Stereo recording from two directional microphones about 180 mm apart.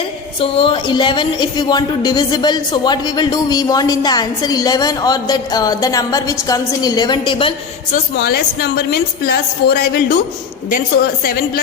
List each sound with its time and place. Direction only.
0.3 s a woman's voice: 30° left (ahead or behind)
7.9 s a woman's voice: 55° left (ahead or behind)